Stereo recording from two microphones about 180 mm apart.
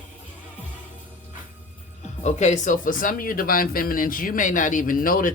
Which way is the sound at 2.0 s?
40° left (ahead or behind).